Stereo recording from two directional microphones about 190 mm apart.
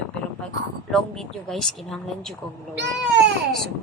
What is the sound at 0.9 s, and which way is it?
Speech, centre (ahead or behind).